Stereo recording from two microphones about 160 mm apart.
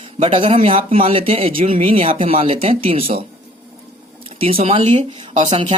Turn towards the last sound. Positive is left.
turn(degrees=-50)  # may be behind; listen again after turning